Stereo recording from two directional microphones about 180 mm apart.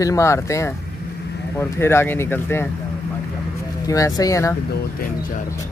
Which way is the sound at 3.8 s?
20° left (ahead or behind).